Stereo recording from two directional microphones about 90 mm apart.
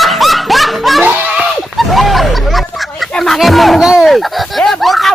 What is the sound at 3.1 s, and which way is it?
Speech, 5° left (ahead or behind).